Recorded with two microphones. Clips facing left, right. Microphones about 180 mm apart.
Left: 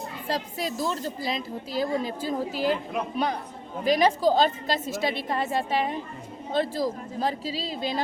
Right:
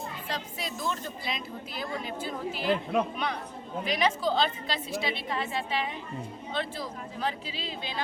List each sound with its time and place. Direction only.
0.3 s a woman's voice: 40° left (ahead or behind)
3.8 s a woman's voice: 40° left (ahead or behind)